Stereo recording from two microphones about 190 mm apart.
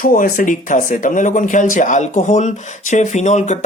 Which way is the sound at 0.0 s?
45° left (ahead or behind).